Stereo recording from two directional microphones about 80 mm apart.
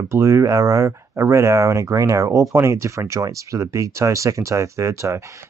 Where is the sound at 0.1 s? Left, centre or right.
Right.